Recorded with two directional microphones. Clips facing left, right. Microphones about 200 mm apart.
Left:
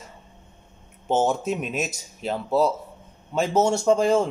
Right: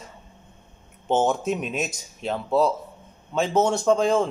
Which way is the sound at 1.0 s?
5° left (ahead or behind).